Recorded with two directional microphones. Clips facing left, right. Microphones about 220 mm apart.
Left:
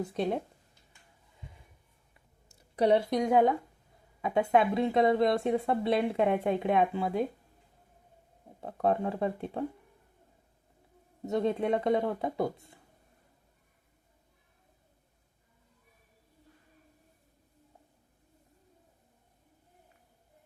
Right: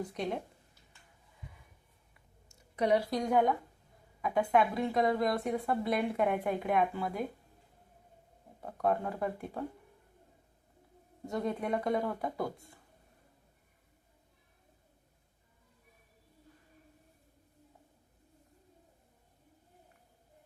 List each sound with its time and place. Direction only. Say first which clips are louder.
2.5 s speech: left 4 dB; 30° left (ahead or behind)
8.6 s speech: left 3 dB; 25° left (ahead or behind)
11.3 s speech: left 5 dB; 25° left (ahead or behind)